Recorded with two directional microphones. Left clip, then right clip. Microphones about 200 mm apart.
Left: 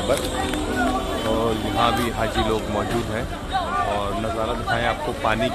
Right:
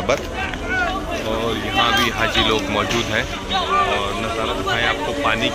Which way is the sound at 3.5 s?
25° left (ahead or behind).